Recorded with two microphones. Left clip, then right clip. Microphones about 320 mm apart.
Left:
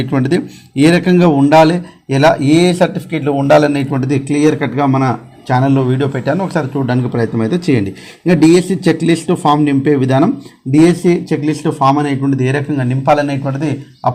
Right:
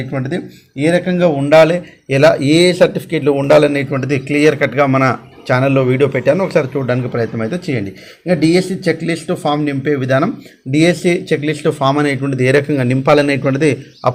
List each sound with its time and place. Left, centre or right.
0.1 s a man's voice: left; by 14.1 s centre